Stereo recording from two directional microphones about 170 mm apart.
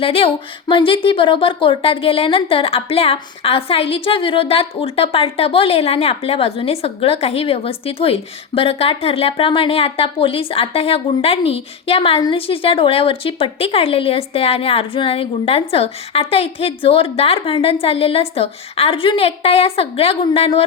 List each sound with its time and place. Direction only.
0.0 s speech: 30° left (ahead or behind)